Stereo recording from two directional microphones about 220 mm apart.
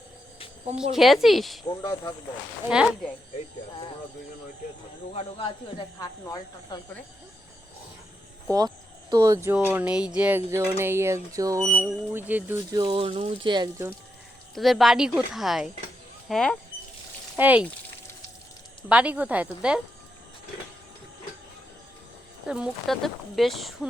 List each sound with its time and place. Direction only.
0.9 s speech: centre (ahead or behind)
1.6 s speech: 15° left (ahead or behind)
2.6 s speech: 5° right (ahead or behind)
5.1 s speech: 25° left (ahead or behind)
8.4 s speech: 15° right (ahead or behind)
10.2 s a sound: 10° right (ahead or behind)
12.7 s speech: 20° right (ahead or behind)
14.5 s speech: centre (ahead or behind)
17.3 s a sound: 10° right (ahead or behind)
18.9 s a sound: 5° right (ahead or behind)
22.4 s speech: 5° right (ahead or behind)